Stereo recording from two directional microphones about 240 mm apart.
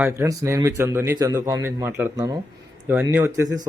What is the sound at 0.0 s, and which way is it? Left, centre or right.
A man's voice, centre.